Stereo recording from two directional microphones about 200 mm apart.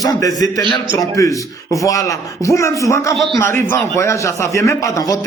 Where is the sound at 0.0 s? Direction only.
20° left (ahead or behind).